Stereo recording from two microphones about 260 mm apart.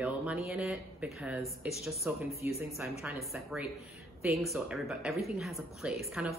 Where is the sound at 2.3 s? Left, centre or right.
Left.